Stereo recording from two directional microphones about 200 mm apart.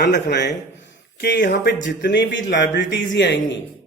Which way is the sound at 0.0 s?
60° left (ahead or behind).